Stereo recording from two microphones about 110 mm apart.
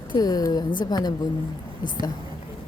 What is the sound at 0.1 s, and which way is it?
A woman's voice, 35° left (ahead or behind).